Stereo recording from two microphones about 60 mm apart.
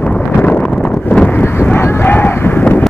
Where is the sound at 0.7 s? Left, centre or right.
Centre.